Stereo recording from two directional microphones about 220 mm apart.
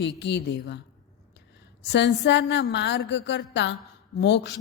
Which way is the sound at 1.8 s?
50° left (ahead or behind).